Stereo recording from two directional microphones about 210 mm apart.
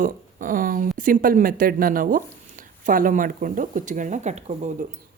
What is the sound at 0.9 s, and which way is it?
Speech, 40° right (ahead or behind).